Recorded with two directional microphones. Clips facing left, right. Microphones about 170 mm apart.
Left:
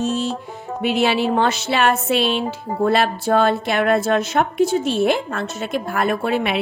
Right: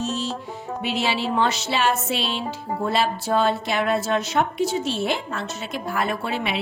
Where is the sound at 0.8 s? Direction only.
55° left (ahead or behind).